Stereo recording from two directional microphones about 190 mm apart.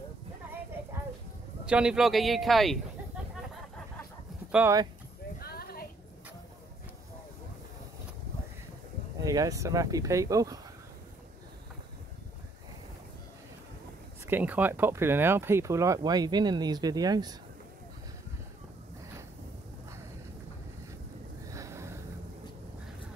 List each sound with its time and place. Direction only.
1.7 s speech: 5° right (ahead or behind)
4.5 s speech: 10° right (ahead or behind)
5.4 s a sound: 55° left (ahead or behind)
9.2 s speech: 15° right (ahead or behind)
14.2 s speech: 10° right (ahead or behind)
21.5 s a sound: 15° right (ahead or behind)